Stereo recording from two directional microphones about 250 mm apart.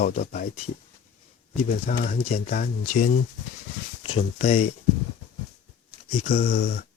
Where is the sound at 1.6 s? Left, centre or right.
Left.